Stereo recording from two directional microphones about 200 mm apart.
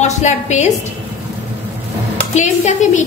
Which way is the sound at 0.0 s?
35° left (ahead or behind).